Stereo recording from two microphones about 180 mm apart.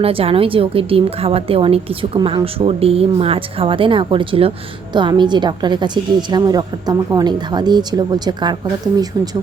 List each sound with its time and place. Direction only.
0.0 s a woman's voice: 30° right (ahead or behind)